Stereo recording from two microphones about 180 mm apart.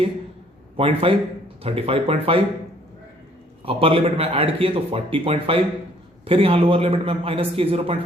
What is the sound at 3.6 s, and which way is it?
A man's voice, 30° right (ahead or behind).